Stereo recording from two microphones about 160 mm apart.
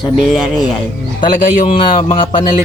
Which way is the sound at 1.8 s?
30° left (ahead or behind).